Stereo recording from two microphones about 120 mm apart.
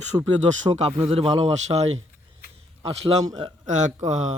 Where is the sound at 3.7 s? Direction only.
80° right.